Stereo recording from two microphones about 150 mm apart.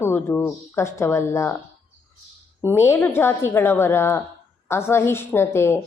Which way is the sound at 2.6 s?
15° left (ahead or behind).